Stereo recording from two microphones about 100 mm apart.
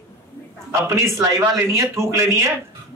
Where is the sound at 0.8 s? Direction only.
30° right (ahead or behind).